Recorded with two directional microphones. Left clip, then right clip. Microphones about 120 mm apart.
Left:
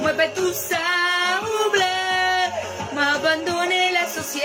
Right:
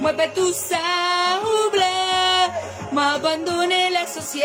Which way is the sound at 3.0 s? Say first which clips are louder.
Even; 25° right (ahead or behind).